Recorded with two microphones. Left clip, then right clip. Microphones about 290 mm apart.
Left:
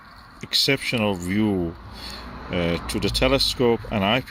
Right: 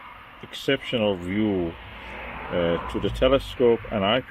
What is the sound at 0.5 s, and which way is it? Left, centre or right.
Speech, centre.